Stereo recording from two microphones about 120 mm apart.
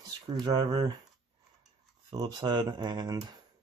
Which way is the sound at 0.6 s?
50° right (ahead or behind).